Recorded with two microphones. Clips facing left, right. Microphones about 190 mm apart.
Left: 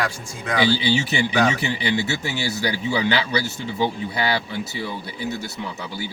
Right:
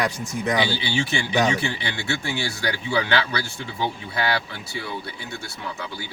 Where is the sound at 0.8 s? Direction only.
20° left (ahead or behind).